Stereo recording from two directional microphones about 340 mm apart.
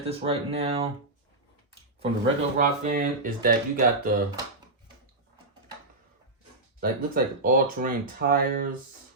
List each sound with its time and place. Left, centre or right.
0.1 s speech: centre
2.0 s speech: centre
6.7 s speech: right